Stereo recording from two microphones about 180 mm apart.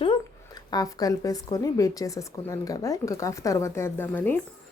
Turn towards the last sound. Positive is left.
turn(degrees=10)  # may be behind; listen again after turning